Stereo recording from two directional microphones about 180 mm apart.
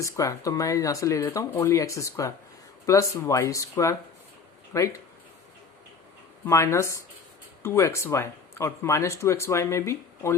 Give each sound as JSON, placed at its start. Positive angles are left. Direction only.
{"t": 0.0, "sound": "speech", "side_deg": 15}
{"t": 6.4, "sound": "speech", "side_deg": 15}